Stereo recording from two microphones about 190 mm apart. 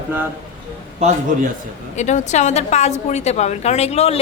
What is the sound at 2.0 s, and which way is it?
A woman's voice, 40° left (ahead or behind).